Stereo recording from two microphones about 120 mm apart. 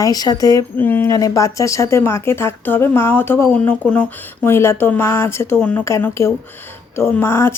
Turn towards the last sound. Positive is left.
turn(degrees=20)  # may be behind; listen again after turning